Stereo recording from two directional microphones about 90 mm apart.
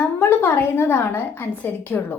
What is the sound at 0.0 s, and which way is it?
A woman's voice, 25° left (ahead or behind).